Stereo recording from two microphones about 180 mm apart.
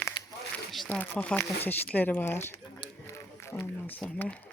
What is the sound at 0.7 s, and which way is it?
Speech, 5° left (ahead or behind).